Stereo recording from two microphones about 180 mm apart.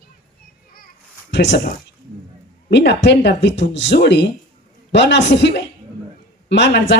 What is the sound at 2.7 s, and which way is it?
A woman's voice, 75° left (ahead or behind).